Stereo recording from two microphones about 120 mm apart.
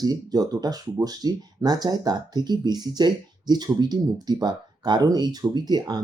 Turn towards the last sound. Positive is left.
turn(degrees=-35)  # may be behind; listen again after turning